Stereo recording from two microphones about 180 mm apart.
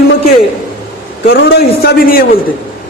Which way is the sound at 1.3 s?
70° left (ahead or behind).